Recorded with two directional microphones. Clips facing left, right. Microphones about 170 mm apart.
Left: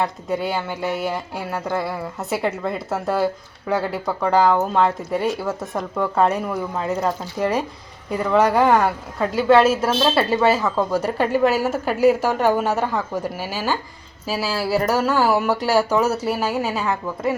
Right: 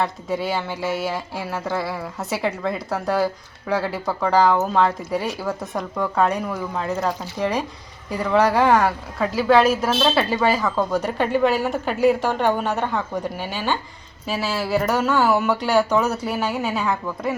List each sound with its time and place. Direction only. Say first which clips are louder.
0.0 s a woman's voice: left 1 dB; centre (ahead or behind)
14.4 s speech: left 1 dB; 35° left (ahead or behind)
14.7 s a woman's voice: left 1 dB; 5° left (ahead or behind)